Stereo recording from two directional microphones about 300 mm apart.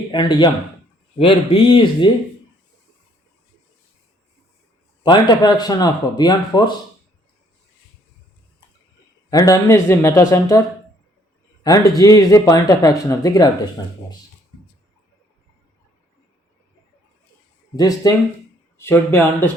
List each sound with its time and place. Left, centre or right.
0.1 s speech: centre
5.0 s speech: centre
9.3 s speech: centre
11.6 s speech: centre
17.7 s speech: centre